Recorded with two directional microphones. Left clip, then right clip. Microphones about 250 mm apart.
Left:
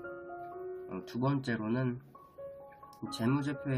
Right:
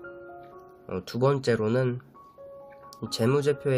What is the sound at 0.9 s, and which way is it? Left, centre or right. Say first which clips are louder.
Speech: right 11 dB; right.